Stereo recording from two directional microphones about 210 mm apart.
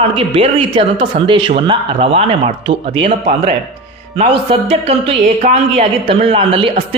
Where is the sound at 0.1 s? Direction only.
25° right (ahead or behind).